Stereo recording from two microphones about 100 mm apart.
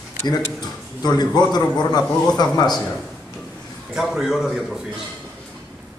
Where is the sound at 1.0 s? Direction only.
40° left (ahead or behind).